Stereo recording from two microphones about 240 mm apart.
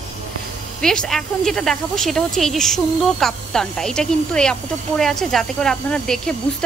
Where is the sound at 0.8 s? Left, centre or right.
Centre.